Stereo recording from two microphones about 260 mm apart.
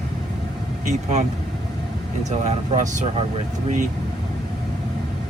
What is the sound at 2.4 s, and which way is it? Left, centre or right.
Speech, right.